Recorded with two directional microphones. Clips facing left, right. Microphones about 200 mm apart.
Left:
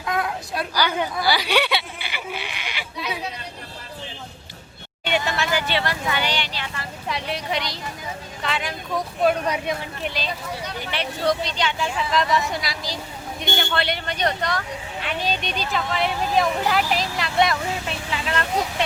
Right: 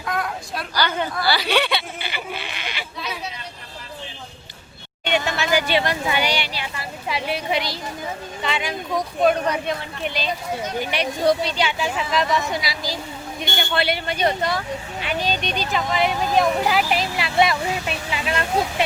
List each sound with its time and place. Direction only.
0.7 s a sound: 10° left (ahead or behind)
5.0 s speech: 5° left (ahead or behind)
5.5 s speech: 15° right (ahead or behind)
10.6 s speech: 45° right (ahead or behind)
10.9 s speech: 15° right (ahead or behind)